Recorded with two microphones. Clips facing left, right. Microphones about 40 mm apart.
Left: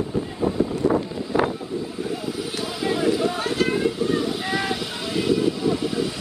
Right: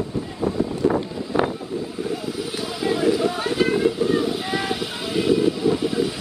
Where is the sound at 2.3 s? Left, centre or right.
Centre.